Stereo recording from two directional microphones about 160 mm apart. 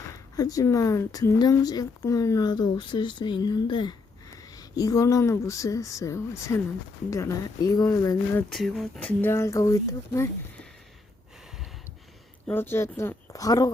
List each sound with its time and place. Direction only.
0.3 s speech: 20° left (ahead or behind)
8.5 s speech: centre (ahead or behind); by 10.2 s 20° left (ahead or behind)
12.5 s speech: 15° left (ahead or behind)